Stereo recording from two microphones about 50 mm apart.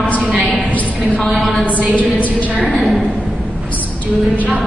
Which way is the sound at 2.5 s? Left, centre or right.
Centre.